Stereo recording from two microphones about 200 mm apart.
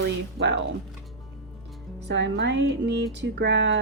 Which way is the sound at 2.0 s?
65° right (ahead or behind).